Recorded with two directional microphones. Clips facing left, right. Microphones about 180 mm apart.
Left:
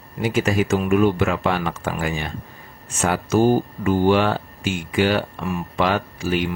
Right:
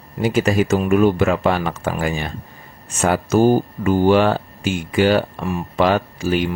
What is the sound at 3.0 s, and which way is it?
Speech, 45° right (ahead or behind).